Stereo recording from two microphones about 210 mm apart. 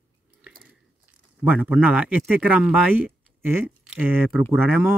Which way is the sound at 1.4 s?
10° right (ahead or behind).